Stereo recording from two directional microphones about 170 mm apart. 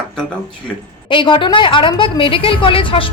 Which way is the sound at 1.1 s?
30° left (ahead or behind).